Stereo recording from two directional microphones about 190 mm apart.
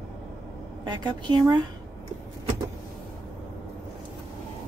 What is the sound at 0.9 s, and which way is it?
Speech, 20° right (ahead or behind).